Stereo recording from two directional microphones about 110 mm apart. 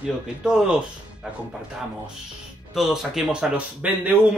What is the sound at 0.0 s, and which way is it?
Speech, 5° right (ahead or behind).